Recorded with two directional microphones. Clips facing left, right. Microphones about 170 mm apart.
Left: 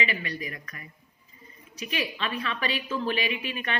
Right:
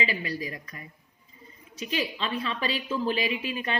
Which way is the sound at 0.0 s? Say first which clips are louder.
Right 1 dB; 30° right (ahead or behind).